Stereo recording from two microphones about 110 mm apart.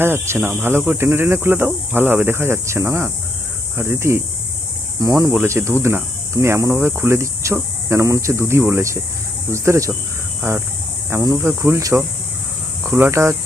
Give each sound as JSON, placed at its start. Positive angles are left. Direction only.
{"t": 0.0, "sound": "speech", "side_deg": -20}
{"t": 5.3, "sound": "speech", "side_deg": -20}
{"t": 11.1, "sound": "speech", "side_deg": -30}